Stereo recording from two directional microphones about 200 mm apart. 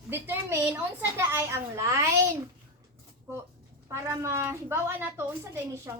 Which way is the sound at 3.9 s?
15° right (ahead or behind).